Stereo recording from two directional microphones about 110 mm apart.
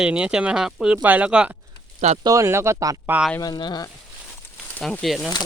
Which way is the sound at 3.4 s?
40° left (ahead or behind).